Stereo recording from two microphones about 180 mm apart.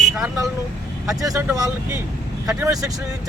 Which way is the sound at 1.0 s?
20° right (ahead or behind).